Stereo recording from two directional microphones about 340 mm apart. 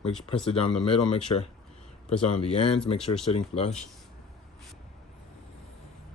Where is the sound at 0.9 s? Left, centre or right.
Centre.